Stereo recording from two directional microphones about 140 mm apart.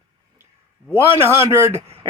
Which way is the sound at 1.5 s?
20° right (ahead or behind).